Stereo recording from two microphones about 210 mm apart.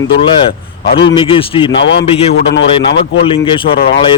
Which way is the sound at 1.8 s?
55° left (ahead or behind).